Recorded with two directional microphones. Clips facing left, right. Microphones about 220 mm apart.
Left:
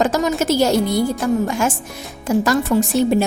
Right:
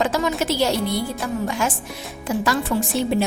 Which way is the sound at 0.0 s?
45° left (ahead or behind).